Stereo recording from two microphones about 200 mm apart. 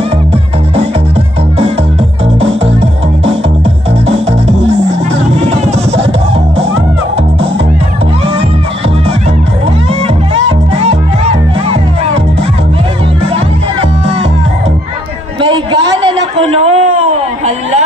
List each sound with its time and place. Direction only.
4.1 s music: 30° right (ahead or behind)
10.3 s music: 30° right (ahead or behind)
15.4 s a sound: 25° right (ahead or behind)